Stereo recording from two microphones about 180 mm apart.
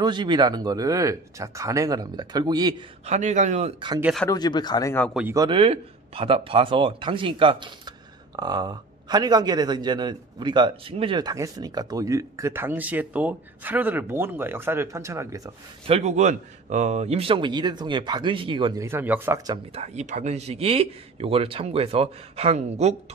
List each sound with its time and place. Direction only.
0.0 s speech: 25° right (ahead or behind)
3.1 s speech: 40° right (ahead or behind)
4.0 s speech: centre (ahead or behind)
4.3 s speech: 25° left (ahead or behind)
5.3 s speech: 20° right (ahead or behind)
5.6 s a man's voice: 30° right (ahead or behind)
15.9 s speech: 40° right (ahead or behind)
18.9 s speech: 10° right (ahead or behind); by 22.9 s 35° right (ahead or behind)